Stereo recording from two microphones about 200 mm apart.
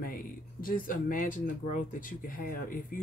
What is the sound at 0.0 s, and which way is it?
Speech, 45° left (ahead or behind).